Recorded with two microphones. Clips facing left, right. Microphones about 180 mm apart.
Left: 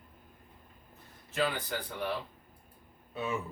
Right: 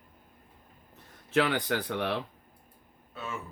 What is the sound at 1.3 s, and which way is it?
Speech, 75° right (ahead or behind).